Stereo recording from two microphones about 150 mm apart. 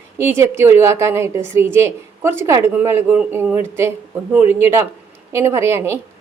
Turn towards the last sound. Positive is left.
turn(degrees=-20)  # may be behind; listen again after turning